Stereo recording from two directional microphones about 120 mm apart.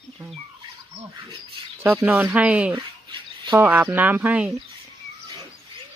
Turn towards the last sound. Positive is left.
turn(degrees=-15)  # may be behind; listen again after turning